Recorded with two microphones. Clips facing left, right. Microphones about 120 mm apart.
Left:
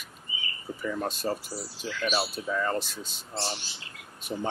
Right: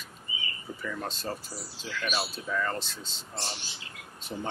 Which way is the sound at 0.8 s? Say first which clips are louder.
Left 5 dB; 15° left (ahead or behind).